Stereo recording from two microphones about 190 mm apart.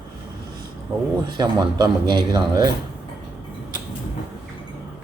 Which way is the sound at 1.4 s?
20° right (ahead or behind).